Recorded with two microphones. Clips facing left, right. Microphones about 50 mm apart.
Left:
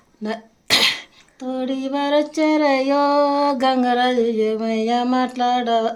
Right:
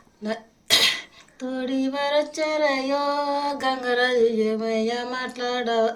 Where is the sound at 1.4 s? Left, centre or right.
Centre.